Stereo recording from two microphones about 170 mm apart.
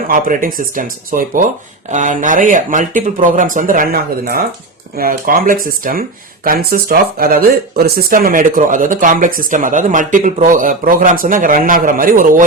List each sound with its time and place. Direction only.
0.1 s speech: 55° right (ahead or behind)
4.9 s speech: 60° right (ahead or behind)